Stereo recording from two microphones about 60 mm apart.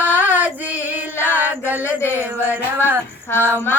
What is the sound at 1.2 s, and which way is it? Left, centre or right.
Chant, right.